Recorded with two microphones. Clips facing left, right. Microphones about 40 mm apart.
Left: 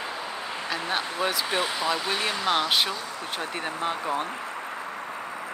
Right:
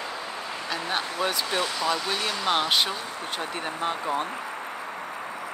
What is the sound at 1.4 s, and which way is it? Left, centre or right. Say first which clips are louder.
Speech: even; centre.